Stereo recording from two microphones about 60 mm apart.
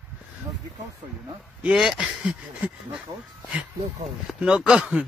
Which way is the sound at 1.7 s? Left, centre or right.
Centre.